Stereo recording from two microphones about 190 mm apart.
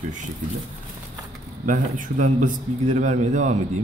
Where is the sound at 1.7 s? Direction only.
40° right (ahead or behind).